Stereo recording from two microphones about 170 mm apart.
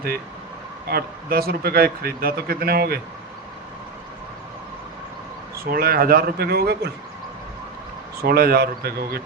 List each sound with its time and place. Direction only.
0.9 s speech: 65° right (ahead or behind)
5.7 s speech: 60° right (ahead or behind)
8.2 s speech: 65° right (ahead or behind)